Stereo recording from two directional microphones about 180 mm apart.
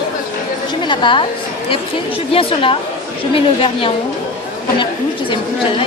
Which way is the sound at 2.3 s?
30° left (ahead or behind).